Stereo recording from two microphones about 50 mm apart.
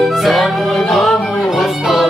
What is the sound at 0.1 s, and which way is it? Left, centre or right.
Music, centre.